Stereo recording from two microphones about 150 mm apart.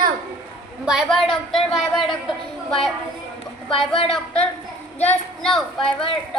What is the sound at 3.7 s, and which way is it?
Speech, 35° left (ahead or behind).